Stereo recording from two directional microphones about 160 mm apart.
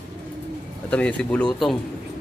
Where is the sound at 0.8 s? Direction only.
10° left (ahead or behind).